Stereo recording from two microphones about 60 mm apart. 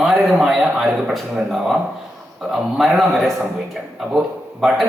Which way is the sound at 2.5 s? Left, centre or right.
Centre.